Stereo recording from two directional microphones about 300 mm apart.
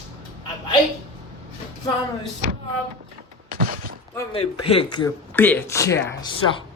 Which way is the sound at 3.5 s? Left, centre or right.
Right.